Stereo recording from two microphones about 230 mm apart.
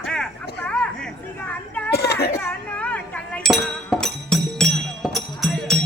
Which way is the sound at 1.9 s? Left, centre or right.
Left.